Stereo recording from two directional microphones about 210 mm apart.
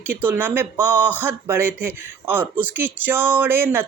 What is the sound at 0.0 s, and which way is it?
A woman's voice, 10° right (ahead or behind).